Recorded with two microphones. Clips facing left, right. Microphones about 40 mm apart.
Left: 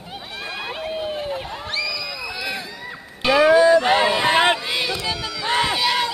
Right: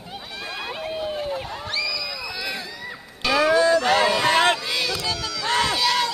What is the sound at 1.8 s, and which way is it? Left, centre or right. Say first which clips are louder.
Crowd: left 1 dB; centre.